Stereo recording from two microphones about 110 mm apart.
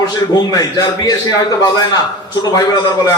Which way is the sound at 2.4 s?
35° left (ahead or behind).